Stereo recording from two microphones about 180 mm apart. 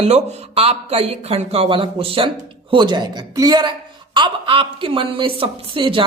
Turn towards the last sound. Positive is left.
turn(degrees=-30)  # may be behind; listen again after turning